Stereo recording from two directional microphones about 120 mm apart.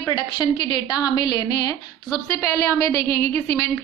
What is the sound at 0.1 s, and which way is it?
A woman's voice, 35° left (ahead or behind).